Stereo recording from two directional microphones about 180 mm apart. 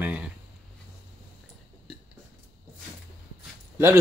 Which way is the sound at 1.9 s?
5° right (ahead or behind).